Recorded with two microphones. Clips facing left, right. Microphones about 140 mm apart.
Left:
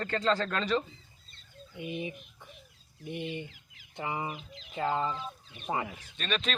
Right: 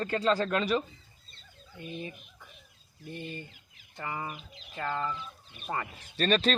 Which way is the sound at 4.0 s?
15° left (ahead or behind).